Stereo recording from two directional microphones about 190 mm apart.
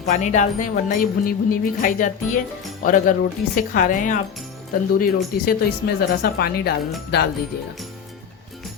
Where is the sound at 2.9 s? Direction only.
45° left (ahead or behind).